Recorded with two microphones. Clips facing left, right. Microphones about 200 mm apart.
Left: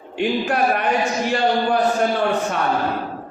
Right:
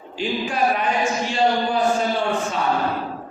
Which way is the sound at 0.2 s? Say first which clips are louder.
Left 3 dB; 60° left (ahead or behind).